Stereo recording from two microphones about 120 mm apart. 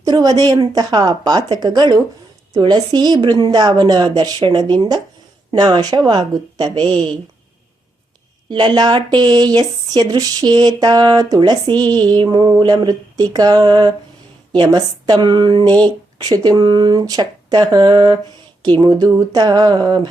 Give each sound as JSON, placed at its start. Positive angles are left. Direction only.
{"t": 0.0, "sound": "speech", "side_deg": -30}
{"t": 8.4, "sound": "speech", "side_deg": -35}